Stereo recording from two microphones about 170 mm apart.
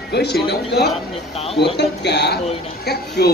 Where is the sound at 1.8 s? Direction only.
80° left.